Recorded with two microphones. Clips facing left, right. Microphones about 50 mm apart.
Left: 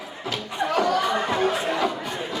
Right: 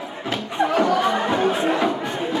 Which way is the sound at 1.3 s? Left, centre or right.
Right.